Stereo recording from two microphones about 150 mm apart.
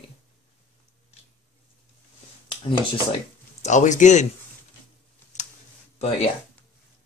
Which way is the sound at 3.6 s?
55° left (ahead or behind).